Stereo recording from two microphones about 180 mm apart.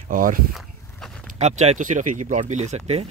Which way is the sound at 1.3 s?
40° right (ahead or behind).